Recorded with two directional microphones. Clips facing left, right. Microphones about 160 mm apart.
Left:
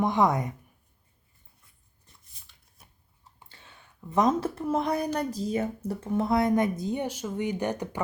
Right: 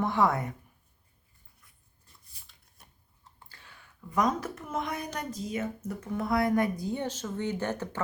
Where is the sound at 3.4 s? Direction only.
20° left (ahead or behind).